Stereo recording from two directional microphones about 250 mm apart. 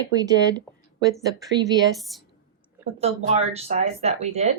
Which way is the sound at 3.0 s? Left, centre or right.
Right.